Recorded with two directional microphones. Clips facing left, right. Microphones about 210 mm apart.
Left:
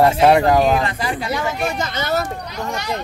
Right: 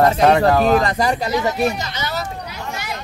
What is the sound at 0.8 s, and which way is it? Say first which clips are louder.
Speech: right 4 dB; 45° right (ahead or behind).